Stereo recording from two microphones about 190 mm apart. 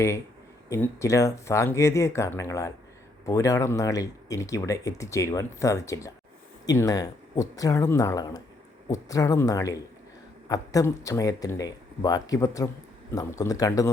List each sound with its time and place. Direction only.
0.7 s speech: 15° left (ahead or behind)